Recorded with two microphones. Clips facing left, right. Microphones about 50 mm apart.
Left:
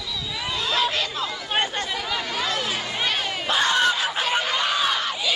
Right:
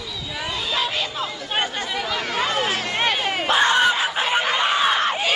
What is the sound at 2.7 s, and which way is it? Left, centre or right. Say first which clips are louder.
Run: right 4 dB; right.